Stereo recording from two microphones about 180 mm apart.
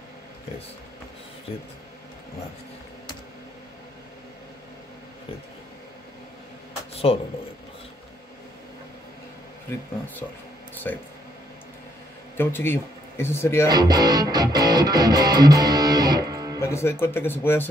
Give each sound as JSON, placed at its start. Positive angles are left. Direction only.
{"t": 6.9, "sound": "a sound", "side_deg": 35}
{"t": 10.9, "sound": "speech", "side_deg": 10}
{"t": 12.4, "sound": "speech", "side_deg": 10}
{"t": 13.7, "sound": "music", "side_deg": -20}
{"t": 16.5, "sound": "speech", "side_deg": 15}